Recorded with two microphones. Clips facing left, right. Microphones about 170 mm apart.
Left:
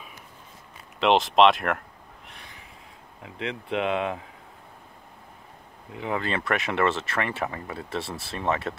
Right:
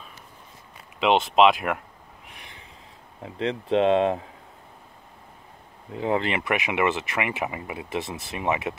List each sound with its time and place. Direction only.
0.9 s speech: 5° right (ahead or behind)
3.2 s speech: 35° right (ahead or behind)
5.9 s speech: 30° right (ahead or behind)
6.2 s speech: 15° right (ahead or behind)